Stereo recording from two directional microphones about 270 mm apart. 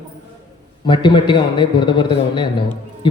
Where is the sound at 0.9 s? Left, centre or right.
Centre.